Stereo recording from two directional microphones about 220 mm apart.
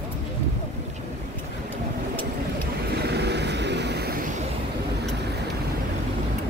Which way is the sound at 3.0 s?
50° right (ahead or behind).